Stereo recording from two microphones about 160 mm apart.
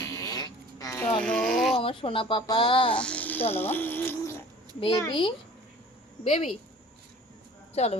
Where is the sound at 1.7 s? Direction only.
35° left (ahead or behind).